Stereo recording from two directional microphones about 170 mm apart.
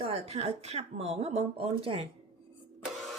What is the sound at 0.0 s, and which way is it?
A woman's voice, 35° right (ahead or behind).